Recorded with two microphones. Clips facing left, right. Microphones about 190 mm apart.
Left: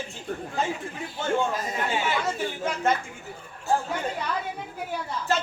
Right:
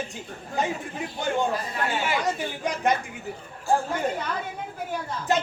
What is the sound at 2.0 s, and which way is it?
Speech, 15° right (ahead or behind).